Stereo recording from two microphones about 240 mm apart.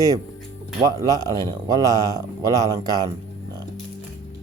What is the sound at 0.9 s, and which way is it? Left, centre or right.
Speech, centre.